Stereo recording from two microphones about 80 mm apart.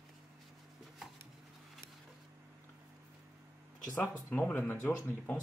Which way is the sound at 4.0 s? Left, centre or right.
Left.